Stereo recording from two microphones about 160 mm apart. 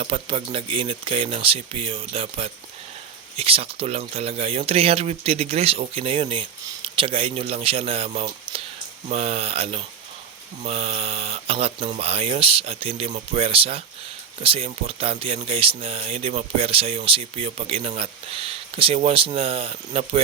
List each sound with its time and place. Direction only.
0.0 s speech: 35° right (ahead or behind)